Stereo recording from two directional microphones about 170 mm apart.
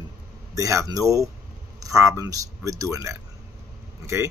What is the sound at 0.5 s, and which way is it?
Speech, 20° right (ahead or behind).